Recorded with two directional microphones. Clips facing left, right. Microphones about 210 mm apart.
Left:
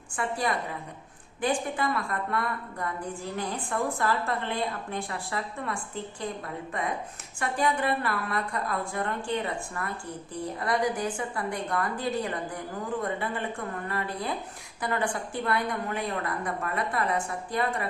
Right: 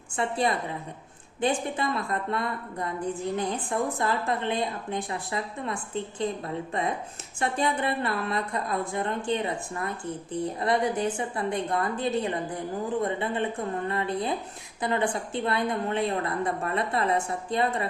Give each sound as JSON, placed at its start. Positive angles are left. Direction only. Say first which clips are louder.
{"t": 0.2, "sound": "a woman's voice", "louder": "right 3 dB", "side_deg": -25}
{"t": 7.3, "sound": "a woman's voice", "louder": "right 1 dB", "side_deg": -25}